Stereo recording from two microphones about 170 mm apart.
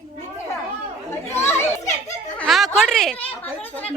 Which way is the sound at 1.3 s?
15° left (ahead or behind).